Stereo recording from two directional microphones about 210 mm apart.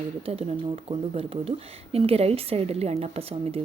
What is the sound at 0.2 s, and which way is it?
Speech, 30° right (ahead or behind).